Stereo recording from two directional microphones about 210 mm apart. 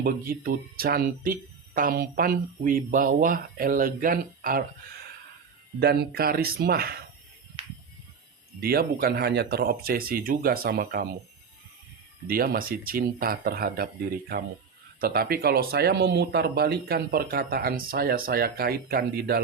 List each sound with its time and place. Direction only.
0.0 s speech: 45° right (ahead or behind)
5.8 s speech: 45° right (ahead or behind)
8.6 s speech: 45° right (ahead or behind)
12.3 s speech: 45° right (ahead or behind)